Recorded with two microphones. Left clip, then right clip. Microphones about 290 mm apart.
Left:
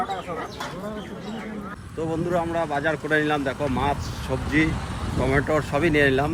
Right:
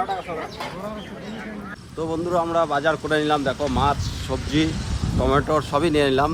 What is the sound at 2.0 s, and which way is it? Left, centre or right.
Speech, centre.